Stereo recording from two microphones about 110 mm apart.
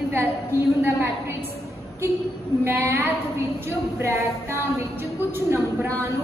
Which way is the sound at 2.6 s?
25° right (ahead or behind).